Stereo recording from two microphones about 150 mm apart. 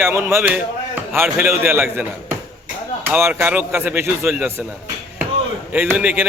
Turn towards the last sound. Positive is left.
turn(degrees=-10)  # may be behind; listen again after turning